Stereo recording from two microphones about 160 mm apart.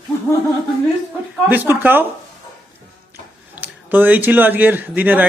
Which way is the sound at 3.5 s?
10° right (ahead or behind).